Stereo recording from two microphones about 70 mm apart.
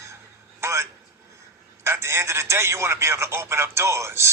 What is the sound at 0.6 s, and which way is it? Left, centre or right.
Speech, right.